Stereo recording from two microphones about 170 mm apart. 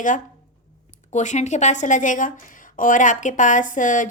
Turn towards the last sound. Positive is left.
turn(degrees=50)  # may be behind; listen again after turning